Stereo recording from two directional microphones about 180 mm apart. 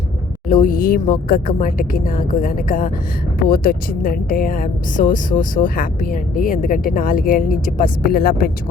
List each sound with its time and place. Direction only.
0.4 s speech: 50° left (ahead or behind)